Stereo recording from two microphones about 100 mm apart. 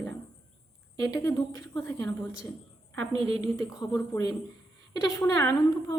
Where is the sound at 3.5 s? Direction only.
35° left (ahead or behind).